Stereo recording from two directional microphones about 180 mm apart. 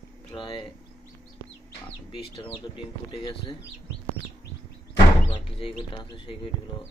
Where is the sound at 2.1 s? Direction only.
30° left (ahead or behind).